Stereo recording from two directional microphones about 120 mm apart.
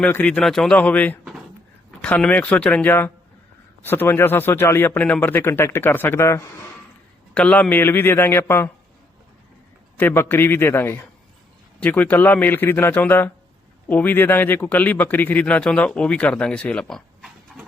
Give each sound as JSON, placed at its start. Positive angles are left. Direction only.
{"t": 0.0, "sound": "speech", "side_deg": 15}
{"t": 7.3, "sound": "a man's voice", "side_deg": 10}
{"t": 10.0, "sound": "a man's voice", "side_deg": 15}
{"t": 17.5, "sound": "clip-clop", "side_deg": 0}